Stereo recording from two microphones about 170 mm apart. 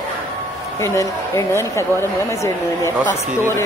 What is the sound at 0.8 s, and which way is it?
Speech, 20° left (ahead or behind).